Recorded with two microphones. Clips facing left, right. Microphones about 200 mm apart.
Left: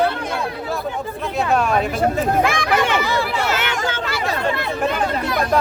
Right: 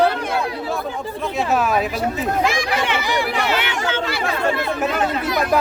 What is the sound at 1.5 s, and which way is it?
Speech, 5° right (ahead or behind).